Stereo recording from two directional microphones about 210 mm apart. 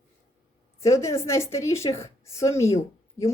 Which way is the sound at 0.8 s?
15° left (ahead or behind).